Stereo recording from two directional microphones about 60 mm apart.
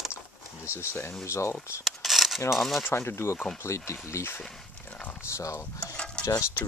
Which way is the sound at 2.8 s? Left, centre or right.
Left.